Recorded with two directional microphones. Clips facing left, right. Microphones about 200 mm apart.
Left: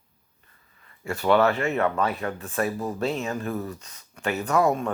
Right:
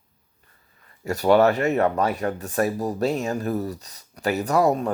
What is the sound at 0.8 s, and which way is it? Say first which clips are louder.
Speech: right 3 dB; 40° right (ahead or behind).